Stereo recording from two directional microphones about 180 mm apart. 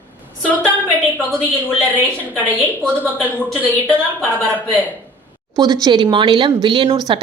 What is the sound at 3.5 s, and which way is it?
Speech, 5° left (ahead or behind).